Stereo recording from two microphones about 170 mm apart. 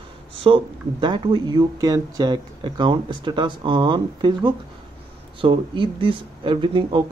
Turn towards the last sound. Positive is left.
turn(degrees=-30)  # may be behind; listen again after turning